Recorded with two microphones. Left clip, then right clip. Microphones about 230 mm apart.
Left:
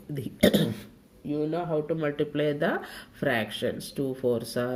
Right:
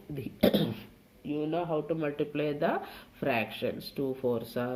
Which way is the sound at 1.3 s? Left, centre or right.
Left.